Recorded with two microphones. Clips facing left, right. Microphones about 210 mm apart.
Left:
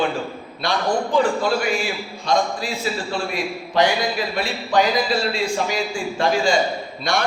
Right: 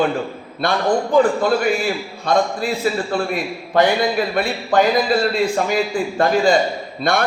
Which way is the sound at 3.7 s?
55° right (ahead or behind).